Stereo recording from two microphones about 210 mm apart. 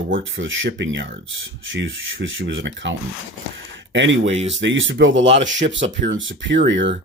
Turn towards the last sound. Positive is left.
turn(degrees=-60)  # may be behind; listen again after turning